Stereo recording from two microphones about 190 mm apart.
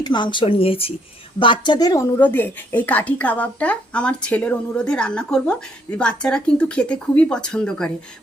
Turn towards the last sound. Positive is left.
turn(degrees=5)  # may be behind; listen again after turning